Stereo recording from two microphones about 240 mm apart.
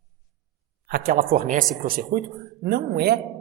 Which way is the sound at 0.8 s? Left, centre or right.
Right.